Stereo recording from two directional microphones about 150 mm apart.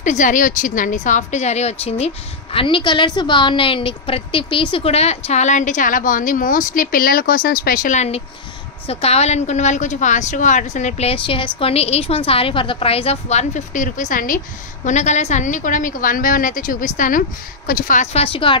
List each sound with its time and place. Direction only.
0.0 s a woman's voice: 55° left (ahead or behind)
14.9 s a woman's voice: 50° left (ahead or behind); by 18.0 s 65° left (ahead or behind)
18.1 s speech: 40° left (ahead or behind)